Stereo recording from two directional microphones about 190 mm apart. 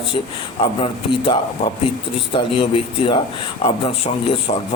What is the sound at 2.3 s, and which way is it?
A man's voice, 25° left (ahead or behind).